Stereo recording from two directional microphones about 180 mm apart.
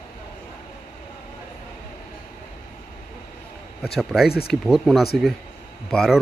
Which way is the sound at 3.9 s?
Centre (ahead or behind).